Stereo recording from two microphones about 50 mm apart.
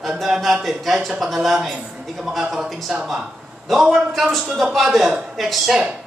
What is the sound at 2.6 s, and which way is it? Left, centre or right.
Speech, centre.